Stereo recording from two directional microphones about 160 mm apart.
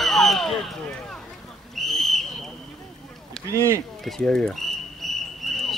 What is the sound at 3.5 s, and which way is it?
Speech, 15° right (ahead or behind).